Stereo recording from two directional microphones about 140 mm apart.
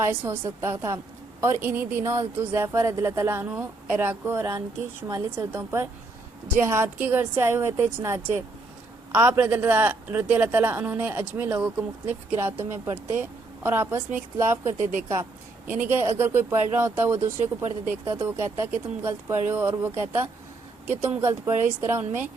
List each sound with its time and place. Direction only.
0.0 s a woman's voice: 15° right (ahead or behind)